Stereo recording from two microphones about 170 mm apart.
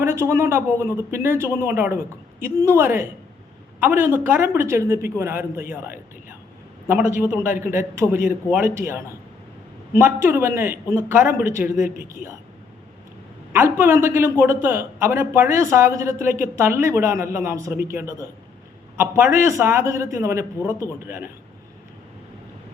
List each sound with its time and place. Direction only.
0.0 s a man's voice: 15° right (ahead or behind)
13.5 s a man's voice: 15° right (ahead or behind)